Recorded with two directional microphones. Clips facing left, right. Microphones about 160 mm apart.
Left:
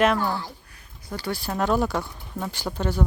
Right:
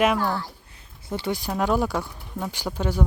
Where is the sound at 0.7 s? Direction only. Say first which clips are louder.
Right 4 dB; 25° right (ahead or behind).